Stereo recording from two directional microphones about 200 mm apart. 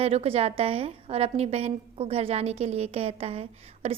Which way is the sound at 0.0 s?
30° right (ahead or behind).